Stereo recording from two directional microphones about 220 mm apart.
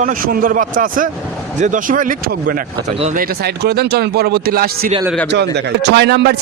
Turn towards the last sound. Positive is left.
turn(degrees=-50)  # may be behind; listen again after turning